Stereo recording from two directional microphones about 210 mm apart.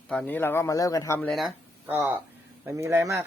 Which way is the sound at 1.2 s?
Centre (ahead or behind).